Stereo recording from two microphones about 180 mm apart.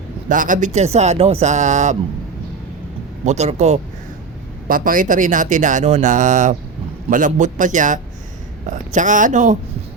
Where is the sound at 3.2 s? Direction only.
40° right (ahead or behind).